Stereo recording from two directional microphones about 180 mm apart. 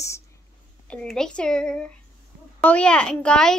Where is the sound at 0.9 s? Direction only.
5° left (ahead or behind).